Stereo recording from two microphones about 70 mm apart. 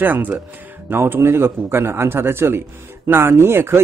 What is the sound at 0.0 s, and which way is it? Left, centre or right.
Speech, right.